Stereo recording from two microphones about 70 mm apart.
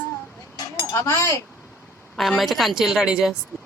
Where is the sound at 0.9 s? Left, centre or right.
Left.